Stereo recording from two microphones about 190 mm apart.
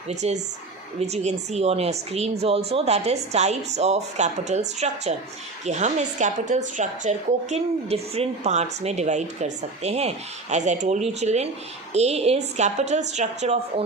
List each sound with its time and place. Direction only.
0.1 s a woman's voice: 35° right (ahead or behind)